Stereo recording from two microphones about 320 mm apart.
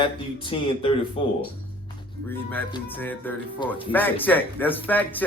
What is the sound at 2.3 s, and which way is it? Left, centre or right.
Speech, centre.